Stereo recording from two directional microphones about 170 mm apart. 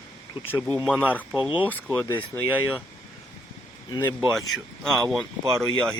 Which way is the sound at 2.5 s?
10° right (ahead or behind).